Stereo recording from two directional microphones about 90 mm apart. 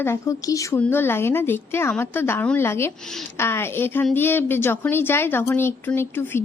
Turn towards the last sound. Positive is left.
turn(degrees=25)  # may be behind; listen again after turning